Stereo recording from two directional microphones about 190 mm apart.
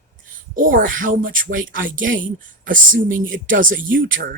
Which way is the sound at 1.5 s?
90° right.